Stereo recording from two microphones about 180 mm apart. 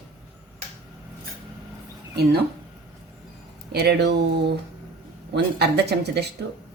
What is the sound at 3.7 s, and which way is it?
Speech, 65° right (ahead or behind).